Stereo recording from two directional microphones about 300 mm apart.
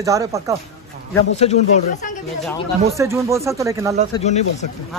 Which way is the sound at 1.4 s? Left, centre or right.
Left.